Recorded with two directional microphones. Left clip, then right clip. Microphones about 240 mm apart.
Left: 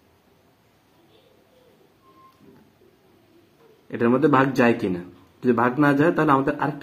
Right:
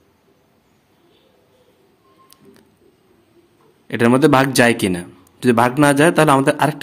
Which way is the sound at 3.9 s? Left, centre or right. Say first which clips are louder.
Right 6 dB; right.